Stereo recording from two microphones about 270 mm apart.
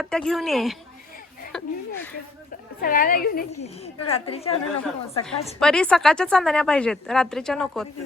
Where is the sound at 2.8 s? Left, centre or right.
Left.